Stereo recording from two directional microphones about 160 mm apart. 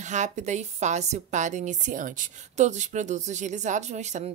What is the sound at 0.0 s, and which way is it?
A woman's voice, 45° right (ahead or behind).